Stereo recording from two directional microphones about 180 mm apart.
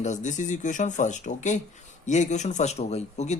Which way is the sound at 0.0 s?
40° left (ahead or behind).